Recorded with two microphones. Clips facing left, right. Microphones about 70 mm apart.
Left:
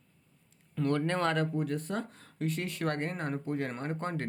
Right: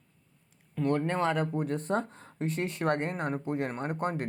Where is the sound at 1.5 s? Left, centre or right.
Right.